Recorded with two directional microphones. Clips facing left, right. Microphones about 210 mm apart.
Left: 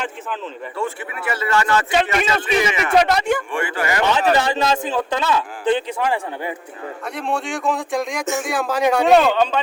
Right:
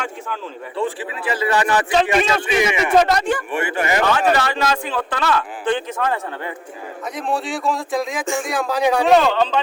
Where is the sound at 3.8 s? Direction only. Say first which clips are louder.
Right 3 dB; 20° right (ahead or behind).